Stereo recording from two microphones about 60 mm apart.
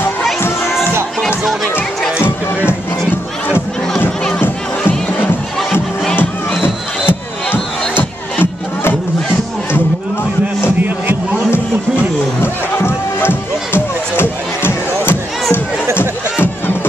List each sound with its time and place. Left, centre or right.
2.2 s crowd: left
4.4 s music: left
6.6 s music: left
10.8 s music: right
12.4 s music: left